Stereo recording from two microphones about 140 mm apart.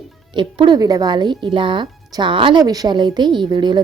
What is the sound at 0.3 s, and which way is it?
A woman's voice, 30° right (ahead or behind).